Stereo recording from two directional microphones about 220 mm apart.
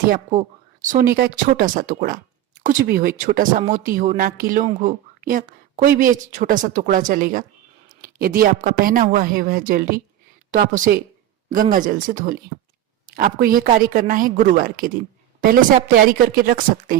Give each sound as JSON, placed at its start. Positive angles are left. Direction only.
{"t": 0.1, "sound": "speech", "side_deg": -35}
{"t": 16.0, "sound": "speech", "side_deg": -40}